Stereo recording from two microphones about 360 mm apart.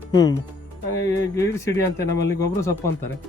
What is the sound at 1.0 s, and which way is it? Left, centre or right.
Speech, left.